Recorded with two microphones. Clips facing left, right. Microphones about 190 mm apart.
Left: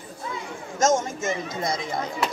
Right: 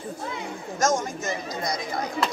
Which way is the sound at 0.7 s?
25° left (ahead or behind).